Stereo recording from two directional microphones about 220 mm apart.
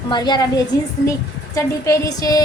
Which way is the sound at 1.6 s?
15° left (ahead or behind).